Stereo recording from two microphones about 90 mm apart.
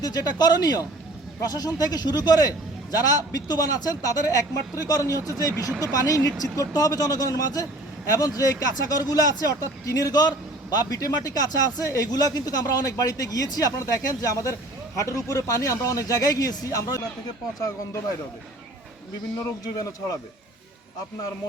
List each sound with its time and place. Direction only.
0.0 s a man's voice: 45° left (ahead or behind)
19.6 s speech: 40° left (ahead or behind)